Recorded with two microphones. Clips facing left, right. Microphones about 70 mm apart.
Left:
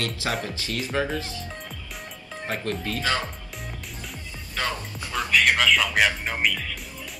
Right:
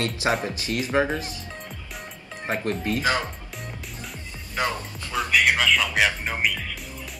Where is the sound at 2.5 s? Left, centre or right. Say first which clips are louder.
Right 3 dB; right.